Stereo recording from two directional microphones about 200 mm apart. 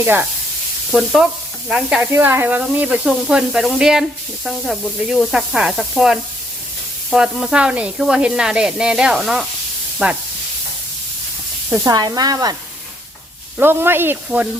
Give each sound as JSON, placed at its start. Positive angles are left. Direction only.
{"t": 0.0, "sound": "speech", "side_deg": -10}
{"t": 0.9, "sound": "sizzle", "side_deg": 0}
{"t": 10.0, "sound": "speech", "side_deg": -5}
{"t": 11.7, "sound": "speech", "side_deg": -20}
{"t": 13.6, "sound": "speech", "side_deg": -10}